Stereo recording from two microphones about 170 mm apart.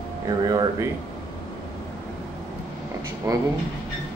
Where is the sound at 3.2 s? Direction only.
20° right (ahead or behind).